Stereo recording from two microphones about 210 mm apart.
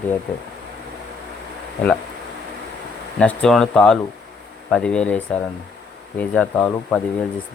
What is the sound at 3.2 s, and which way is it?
Speech, 5° left (ahead or behind).